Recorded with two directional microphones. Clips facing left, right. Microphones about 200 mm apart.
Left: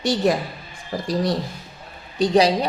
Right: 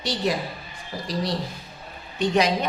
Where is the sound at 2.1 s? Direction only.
35° left (ahead or behind).